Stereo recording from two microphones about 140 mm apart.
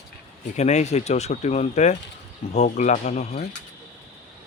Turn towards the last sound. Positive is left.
turn(degrees=55)  # may be behind; listen again after turning